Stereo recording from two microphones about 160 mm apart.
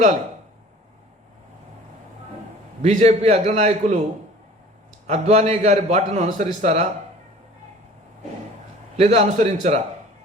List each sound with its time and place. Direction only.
2.8 s a man's voice: 45° right (ahead or behind)
5.0 s a man's voice: 50° right (ahead or behind)
9.0 s a man's voice: 40° right (ahead or behind)